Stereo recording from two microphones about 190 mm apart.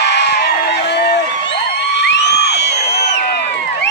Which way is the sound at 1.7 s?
65° left (ahead or behind).